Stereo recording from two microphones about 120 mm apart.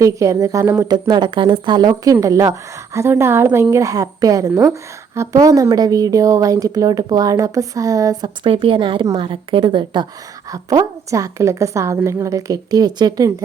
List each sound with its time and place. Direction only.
0.0 s a woman's voice: 25° right (ahead or behind)
0.9 s a woman's voice: 35° right (ahead or behind)
8.4 s a woman's voice: 45° right (ahead or behind)
10.5 s a woman's voice: 30° right (ahead or behind)